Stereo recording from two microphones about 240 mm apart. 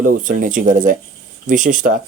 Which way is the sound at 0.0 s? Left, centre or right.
Right.